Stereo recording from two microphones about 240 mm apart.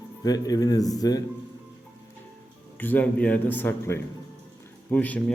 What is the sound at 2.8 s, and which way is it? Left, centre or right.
A man's voice, centre.